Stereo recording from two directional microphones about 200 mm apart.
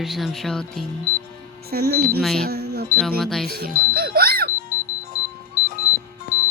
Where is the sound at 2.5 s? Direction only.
50° right (ahead or behind).